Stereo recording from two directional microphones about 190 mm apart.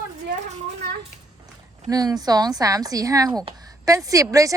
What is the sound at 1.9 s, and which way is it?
A woman's voice, 20° right (ahead or behind).